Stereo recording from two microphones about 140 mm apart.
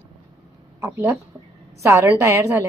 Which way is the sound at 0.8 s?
15° right (ahead or behind).